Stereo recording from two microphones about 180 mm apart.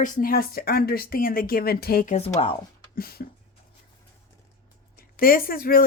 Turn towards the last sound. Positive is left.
turn(degrees=55)  # may be behind; listen again after turning